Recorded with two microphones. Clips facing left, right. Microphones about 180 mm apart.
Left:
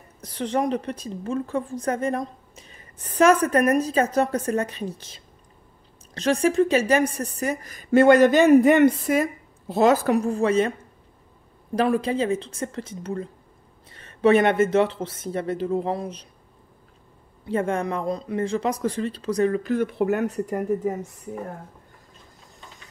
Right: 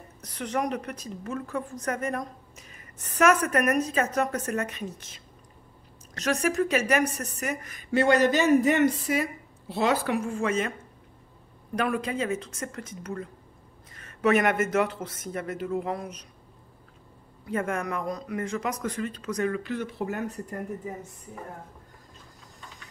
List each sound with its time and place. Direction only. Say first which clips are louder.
0.2 s a woman's voice: left 5 dB; 30° left (ahead or behind)
7.9 s a woman's voice: left 7 dB; 50° left (ahead or behind); by 10.7 s 35° left (ahead or behind)
11.7 s a man's voice: left 6 dB; 30° left (ahead or behind)
17.5 s a man's voice: left 5 dB; 30° left (ahead or behind); by 20.9 s 90° left